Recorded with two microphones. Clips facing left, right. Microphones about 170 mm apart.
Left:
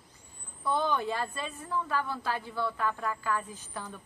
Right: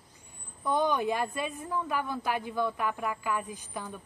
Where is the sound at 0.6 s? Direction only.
15° right (ahead or behind).